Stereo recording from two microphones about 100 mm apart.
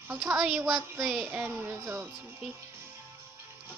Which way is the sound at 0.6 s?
30° right (ahead or behind).